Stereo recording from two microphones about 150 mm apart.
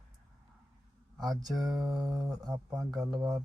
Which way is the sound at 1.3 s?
Centre (ahead or behind).